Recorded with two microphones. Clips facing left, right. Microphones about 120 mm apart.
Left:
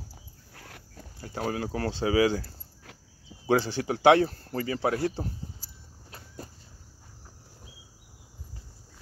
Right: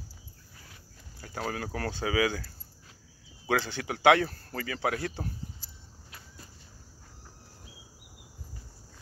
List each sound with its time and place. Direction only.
0.6 s cricket: 70° left (ahead or behind)
1.2 s speech: 25° left (ahead or behind)